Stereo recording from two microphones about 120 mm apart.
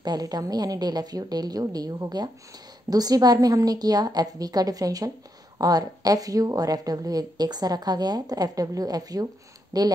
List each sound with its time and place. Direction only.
0.0 s a woman's voice: 35° right (ahead or behind)